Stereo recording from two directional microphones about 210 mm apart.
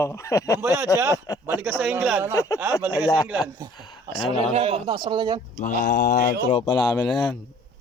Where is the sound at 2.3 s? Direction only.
15° left (ahead or behind).